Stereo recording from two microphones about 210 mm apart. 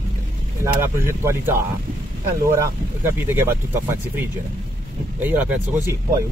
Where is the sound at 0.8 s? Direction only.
10° right (ahead or behind).